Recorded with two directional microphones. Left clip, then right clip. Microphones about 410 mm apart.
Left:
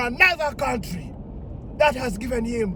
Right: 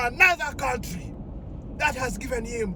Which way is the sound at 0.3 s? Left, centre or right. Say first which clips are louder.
Left 2 dB; centre.